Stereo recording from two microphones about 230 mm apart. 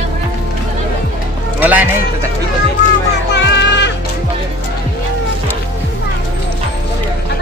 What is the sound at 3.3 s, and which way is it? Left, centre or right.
Music, left.